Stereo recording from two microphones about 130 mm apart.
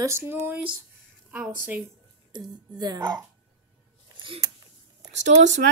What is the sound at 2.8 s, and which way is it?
Speech, 30° right (ahead or behind).